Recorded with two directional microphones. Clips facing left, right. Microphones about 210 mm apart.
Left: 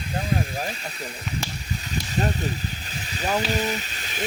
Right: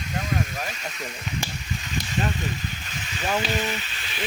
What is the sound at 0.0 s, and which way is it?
Snake, 35° left (ahead or behind).